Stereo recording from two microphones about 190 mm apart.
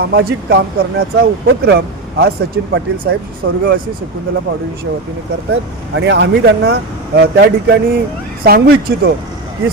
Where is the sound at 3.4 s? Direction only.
60° right (ahead or behind).